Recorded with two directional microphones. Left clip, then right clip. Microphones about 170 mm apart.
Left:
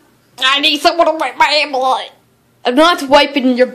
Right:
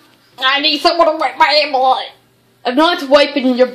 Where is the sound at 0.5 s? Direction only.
10° left (ahead or behind).